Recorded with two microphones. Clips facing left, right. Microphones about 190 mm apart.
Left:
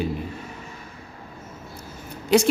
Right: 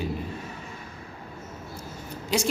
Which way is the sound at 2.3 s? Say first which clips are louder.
Left 9 dB; 60° left (ahead or behind).